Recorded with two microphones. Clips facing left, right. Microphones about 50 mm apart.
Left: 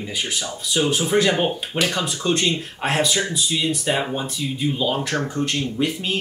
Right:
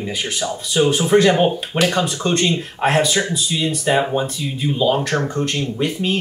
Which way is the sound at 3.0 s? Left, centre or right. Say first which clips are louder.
Right 3 dB; right.